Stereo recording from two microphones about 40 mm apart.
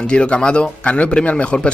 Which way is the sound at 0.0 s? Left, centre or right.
Left.